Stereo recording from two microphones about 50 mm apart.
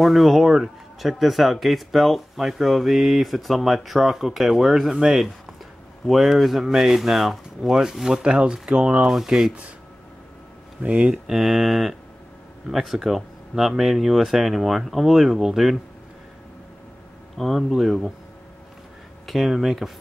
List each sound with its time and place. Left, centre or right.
0.0 s speech: centre
8.2 s speech: centre
9.0 s speech: centre
10.8 s speech: right
11.2 s speech: centre
17.4 s speech: centre
19.2 s speech: centre